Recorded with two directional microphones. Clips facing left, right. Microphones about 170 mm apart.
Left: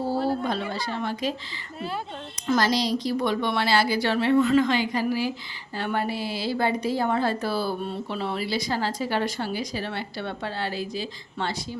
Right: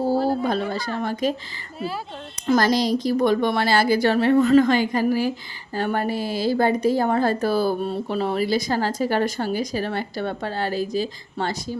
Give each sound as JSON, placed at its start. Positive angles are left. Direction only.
{"t": 0.4, "sound": "a woman's voice", "side_deg": -45}
{"t": 2.5, "sound": "a woman's voice", "side_deg": -45}